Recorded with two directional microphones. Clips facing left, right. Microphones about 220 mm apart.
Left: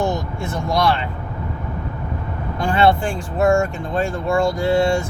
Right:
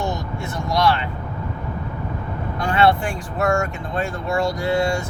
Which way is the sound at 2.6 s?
30° left (ahead or behind).